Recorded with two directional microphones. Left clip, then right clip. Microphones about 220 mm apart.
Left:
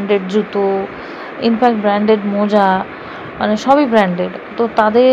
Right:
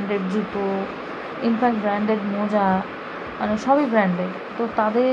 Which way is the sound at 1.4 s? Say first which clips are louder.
Left 8 dB; 30° left (ahead or behind).